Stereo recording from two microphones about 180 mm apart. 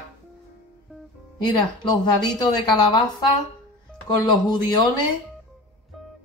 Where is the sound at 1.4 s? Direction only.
25° left (ahead or behind).